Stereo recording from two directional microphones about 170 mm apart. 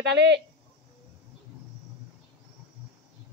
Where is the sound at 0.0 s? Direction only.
90° right.